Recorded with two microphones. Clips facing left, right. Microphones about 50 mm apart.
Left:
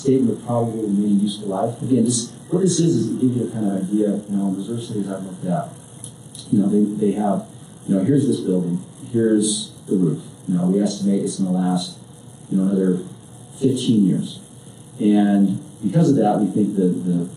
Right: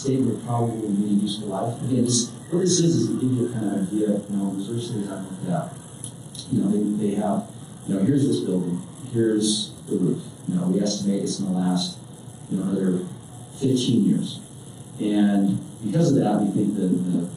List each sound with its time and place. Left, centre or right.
0.0 s a man's voice: centre